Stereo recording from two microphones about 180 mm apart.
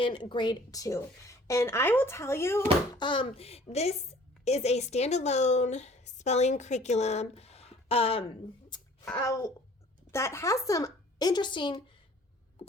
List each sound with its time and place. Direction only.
0.0 s a woman's voice: 25° left (ahead or behind)
2.9 s a woman's voice: 25° left (ahead or behind)
9.1 s a woman's voice: 15° left (ahead or behind)